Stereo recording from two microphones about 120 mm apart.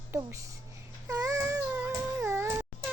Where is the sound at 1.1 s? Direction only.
30° right (ahead or behind).